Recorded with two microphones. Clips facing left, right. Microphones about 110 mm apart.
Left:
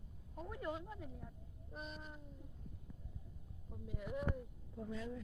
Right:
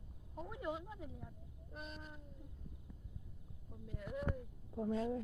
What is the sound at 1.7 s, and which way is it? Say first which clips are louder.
Speech: left 1 dB; 5° left (ahead or behind).